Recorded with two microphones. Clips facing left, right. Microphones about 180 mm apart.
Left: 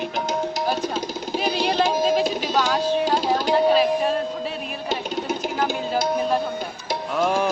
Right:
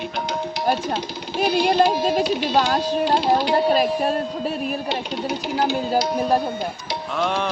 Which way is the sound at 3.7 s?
40° right (ahead or behind).